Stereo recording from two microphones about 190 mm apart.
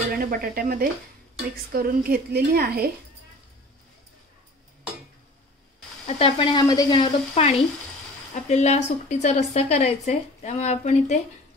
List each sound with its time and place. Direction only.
0.1 s a woman's voice: 50° right (ahead or behind)
6.0 s speech: 30° left (ahead or behind)